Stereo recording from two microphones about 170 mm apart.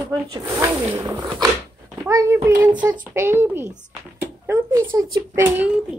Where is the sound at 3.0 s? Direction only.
15° right (ahead or behind).